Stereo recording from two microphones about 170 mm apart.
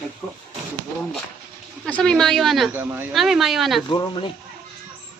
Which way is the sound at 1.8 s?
5° left (ahead or behind).